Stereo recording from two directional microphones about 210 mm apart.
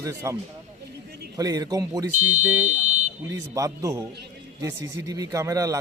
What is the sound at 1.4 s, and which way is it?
Speech, 15° right (ahead or behind).